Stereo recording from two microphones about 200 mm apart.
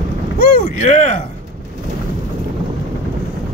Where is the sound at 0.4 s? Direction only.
40° left (ahead or behind).